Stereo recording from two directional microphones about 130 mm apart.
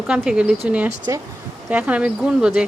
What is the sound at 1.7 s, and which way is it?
Speech, 10° right (ahead or behind).